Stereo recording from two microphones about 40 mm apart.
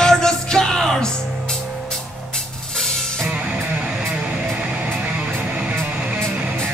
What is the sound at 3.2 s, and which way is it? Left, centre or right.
Music, right.